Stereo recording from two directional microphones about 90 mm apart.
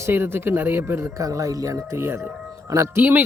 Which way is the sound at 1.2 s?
40° right (ahead or behind).